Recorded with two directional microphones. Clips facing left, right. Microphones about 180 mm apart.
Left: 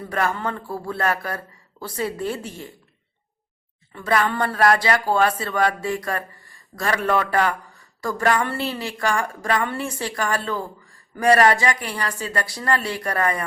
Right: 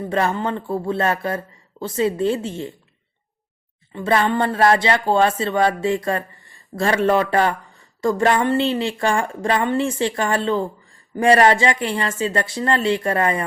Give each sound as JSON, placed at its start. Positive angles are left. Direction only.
{"t": 0.1, "sound": "speech", "side_deg": -25}
{"t": 3.9, "sound": "speech", "side_deg": -25}